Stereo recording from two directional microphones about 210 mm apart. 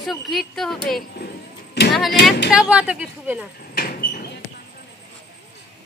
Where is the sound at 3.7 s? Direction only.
45° left (ahead or behind).